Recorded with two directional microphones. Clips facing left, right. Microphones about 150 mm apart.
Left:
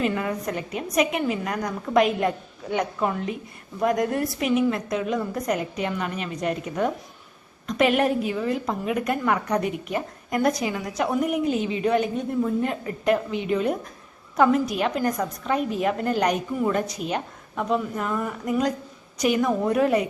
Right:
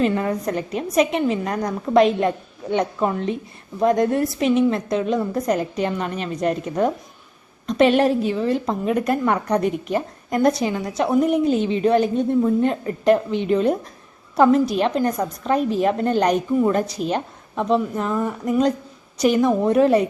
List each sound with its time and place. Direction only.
0.0 s a woman's voice: 35° right (ahead or behind)